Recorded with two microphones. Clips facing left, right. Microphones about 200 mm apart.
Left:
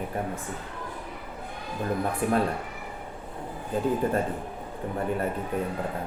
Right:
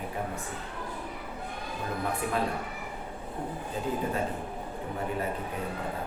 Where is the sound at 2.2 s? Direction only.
50° left (ahead or behind).